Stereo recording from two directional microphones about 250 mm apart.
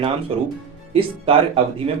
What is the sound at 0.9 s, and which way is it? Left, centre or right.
Speech, right.